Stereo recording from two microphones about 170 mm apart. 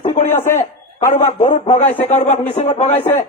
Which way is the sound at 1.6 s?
40° left (ahead or behind).